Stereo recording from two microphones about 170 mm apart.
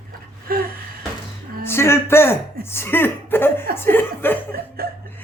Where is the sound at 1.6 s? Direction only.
15° left (ahead or behind).